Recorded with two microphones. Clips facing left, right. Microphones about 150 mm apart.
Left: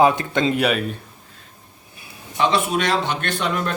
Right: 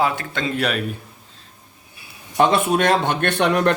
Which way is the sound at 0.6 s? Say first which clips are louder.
Left 2 dB; 5° left (ahead or behind).